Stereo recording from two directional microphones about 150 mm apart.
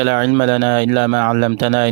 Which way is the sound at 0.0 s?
70° right (ahead or behind).